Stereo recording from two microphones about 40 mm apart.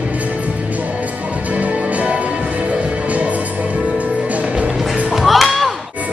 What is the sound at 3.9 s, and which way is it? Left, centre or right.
Music, right.